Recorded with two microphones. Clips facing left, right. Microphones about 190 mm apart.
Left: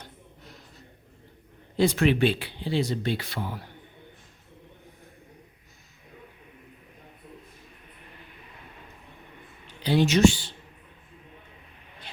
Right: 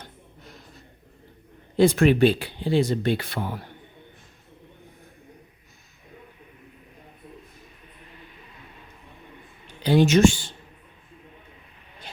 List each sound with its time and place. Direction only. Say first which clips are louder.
1.7 s speech: right 4 dB; 50° right (ahead or behind)
9.8 s speech: right 3 dB; 50° right (ahead or behind)